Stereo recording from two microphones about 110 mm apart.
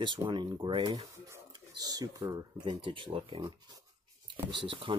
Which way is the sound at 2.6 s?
50° right (ahead or behind).